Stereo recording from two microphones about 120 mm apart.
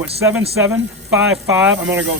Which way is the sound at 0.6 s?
15° right (ahead or behind).